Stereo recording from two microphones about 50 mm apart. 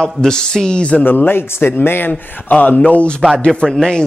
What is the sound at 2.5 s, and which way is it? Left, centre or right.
Speech, left.